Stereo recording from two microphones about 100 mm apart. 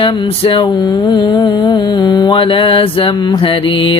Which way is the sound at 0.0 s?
55° left (ahead or behind).